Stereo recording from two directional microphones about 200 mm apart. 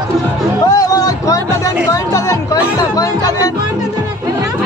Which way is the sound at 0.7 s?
20° left (ahead or behind).